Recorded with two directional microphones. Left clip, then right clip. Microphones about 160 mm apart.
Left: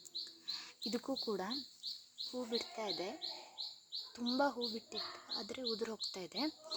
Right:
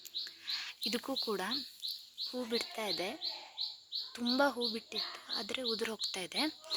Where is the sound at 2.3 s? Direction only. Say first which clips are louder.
Right 3 dB; 20° right (ahead or behind).